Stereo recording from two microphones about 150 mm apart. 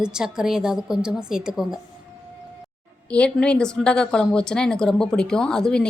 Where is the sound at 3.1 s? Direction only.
5° left (ahead or behind).